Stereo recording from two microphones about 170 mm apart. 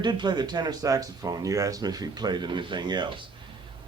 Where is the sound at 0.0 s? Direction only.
25° right (ahead or behind).